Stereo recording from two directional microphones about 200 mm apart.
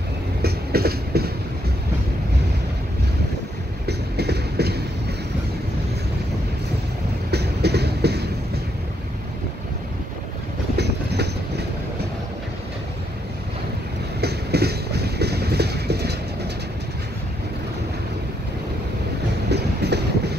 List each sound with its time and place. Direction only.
0.4 s train: 50° right (ahead or behind)
3.8 s train: 55° right (ahead or behind)
7.2 s vehicle: 55° right (ahead or behind)
10.8 s train: 55° right (ahead or behind)
14.2 s train: 55° right (ahead or behind)
19.5 s train: 55° right (ahead or behind)